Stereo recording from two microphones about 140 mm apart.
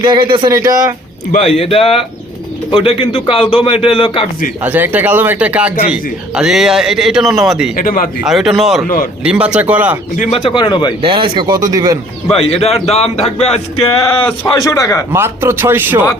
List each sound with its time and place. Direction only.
0.0 s speech: 35° right (ahead or behind)
1.4 s a man's voice: 45° left (ahead or behind)
4.6 s speech: 15° right (ahead or behind)
7.8 s speech: 80° left
8.2 s a man's voice: centre (ahead or behind)
10.2 s a man's voice: 50° left (ahead or behind)
10.5 s a man's voice: 30° left (ahead or behind)
11.0 s speech: 35° right (ahead or behind)
12.3 s a man's voice: 45° left (ahead or behind)
14.5 s a man's voice: 25° left (ahead or behind)
15.1 s a man's voice: 15° right (ahead or behind)